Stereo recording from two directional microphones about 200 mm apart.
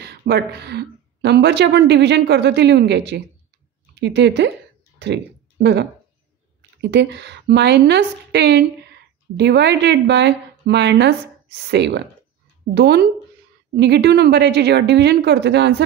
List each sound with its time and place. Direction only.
0.0 s speech: 50° right (ahead or behind)